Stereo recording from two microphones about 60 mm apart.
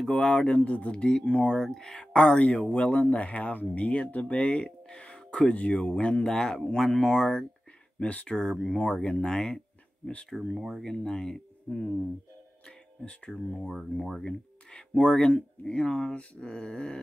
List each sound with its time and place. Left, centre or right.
0.1 s speech: centre
6.2 s speech: centre
8.0 s speech: centre
8.4 s speech: centre
10.3 s speech: centre
10.8 s speech: centre